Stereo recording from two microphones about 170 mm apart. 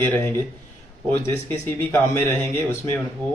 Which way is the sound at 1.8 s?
10° left (ahead or behind).